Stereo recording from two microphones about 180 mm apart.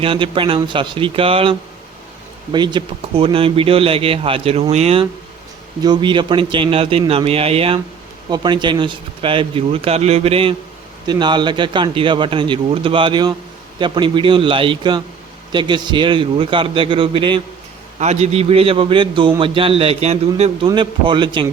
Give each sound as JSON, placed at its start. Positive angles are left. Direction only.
{"t": 0.0, "sound": "a man's voice", "side_deg": -30}
{"t": 18.0, "sound": "a man's voice", "side_deg": -40}